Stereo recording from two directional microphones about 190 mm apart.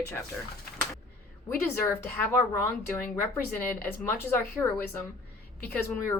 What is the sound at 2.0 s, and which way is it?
Speech, 10° left (ahead or behind).